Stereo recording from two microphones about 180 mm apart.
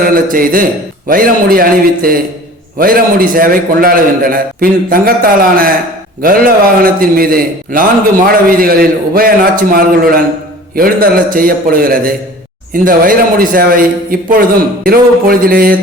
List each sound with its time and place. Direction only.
0.0 s a man's voice: 50° right (ahead or behind)